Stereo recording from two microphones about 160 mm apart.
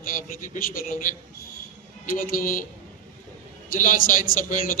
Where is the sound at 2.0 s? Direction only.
60° left (ahead or behind).